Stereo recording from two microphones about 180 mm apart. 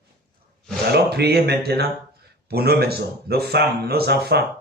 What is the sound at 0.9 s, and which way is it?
Speech, 65° right (ahead or behind).